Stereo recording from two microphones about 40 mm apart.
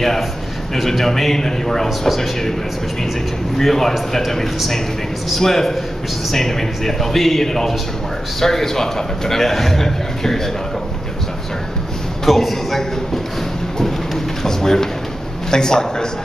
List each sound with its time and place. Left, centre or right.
0.7 s a man's voice: centre
3.5 s a man's voice: centre
12.3 s a man's voice: centre
13.7 s a sound: centre
15.5 s a man's voice: centre